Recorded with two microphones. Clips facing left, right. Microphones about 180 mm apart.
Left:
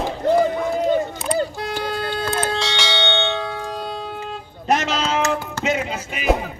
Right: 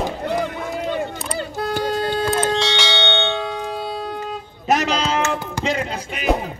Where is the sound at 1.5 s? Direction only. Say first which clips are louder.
Right 4 dB; 45° right (ahead or behind).